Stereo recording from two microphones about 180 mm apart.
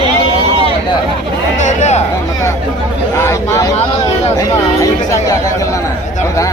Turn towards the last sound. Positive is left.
turn(degrees=20)  # may be behind; listen again after turning